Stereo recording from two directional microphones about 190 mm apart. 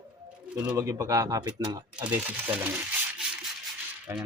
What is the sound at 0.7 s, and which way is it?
Speech, 15° right (ahead or behind).